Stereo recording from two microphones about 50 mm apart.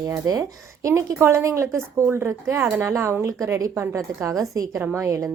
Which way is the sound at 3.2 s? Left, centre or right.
Right.